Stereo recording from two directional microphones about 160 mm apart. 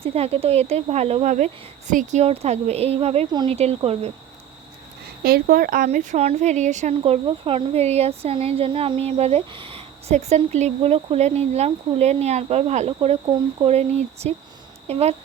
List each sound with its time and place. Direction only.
0.0 s speech: 40° right (ahead or behind)
5.2 s speech: 65° right (ahead or behind); by 6.9 s 45° right (ahead or behind)
7.0 s speech: 35° right (ahead or behind)